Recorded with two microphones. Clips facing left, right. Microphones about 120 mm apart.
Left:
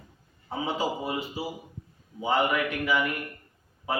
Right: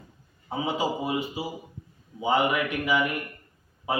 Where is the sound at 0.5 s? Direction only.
15° right (ahead or behind).